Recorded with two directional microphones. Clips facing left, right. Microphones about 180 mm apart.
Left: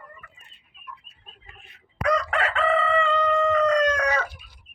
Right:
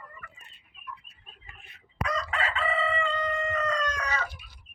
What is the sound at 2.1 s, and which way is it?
Chicken, 65° left (ahead or behind).